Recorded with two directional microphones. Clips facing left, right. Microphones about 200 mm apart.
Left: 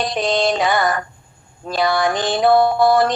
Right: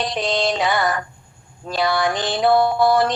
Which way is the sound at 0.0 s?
50° left (ahead or behind).